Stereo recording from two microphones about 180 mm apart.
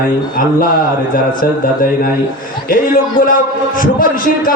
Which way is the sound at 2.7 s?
50° left (ahead or behind).